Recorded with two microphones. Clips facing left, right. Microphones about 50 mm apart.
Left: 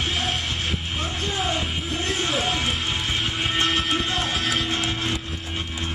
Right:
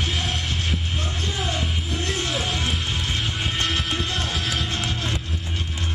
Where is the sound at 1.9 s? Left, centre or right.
Centre.